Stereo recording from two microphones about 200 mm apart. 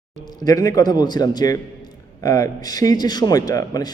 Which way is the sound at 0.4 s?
20° left (ahead or behind).